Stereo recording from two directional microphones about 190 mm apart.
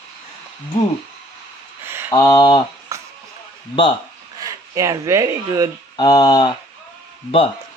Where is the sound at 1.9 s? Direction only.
10° right (ahead or behind).